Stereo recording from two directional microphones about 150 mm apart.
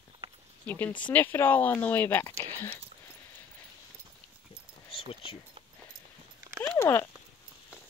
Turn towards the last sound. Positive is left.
turn(degrees=15)  # may be behind; listen again after turning